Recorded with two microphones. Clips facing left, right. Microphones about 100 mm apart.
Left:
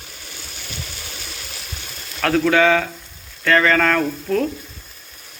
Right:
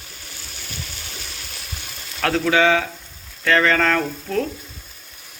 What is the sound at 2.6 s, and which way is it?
Speech, 20° right (ahead or behind).